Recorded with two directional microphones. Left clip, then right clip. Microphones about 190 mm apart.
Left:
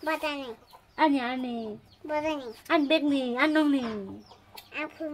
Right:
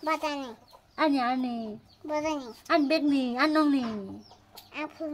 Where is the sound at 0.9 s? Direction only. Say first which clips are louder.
Left 1 dB; 5° right (ahead or behind).